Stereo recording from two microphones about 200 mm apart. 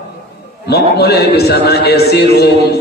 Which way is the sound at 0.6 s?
55° left (ahead or behind).